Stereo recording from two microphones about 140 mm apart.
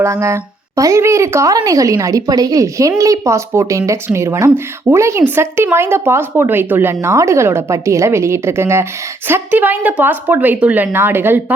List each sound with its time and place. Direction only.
0.0 s speech: 20° right (ahead or behind)